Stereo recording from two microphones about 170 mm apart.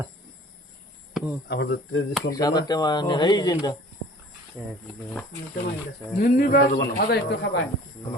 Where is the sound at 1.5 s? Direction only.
90° left.